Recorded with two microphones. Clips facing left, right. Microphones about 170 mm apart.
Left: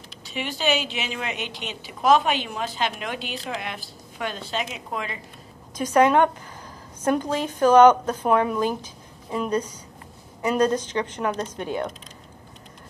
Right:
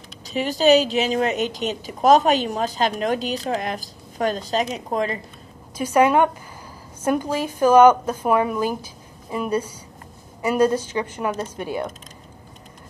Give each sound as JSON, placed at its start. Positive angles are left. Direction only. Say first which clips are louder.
{"t": 0.2, "sound": "a woman's voice", "louder": "right 8 dB", "side_deg": -40}
{"t": 5.8, "sound": "a woman's voice", "louder": "right 1 dB", "side_deg": -10}